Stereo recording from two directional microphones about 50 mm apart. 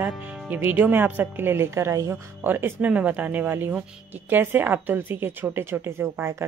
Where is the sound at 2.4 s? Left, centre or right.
Right.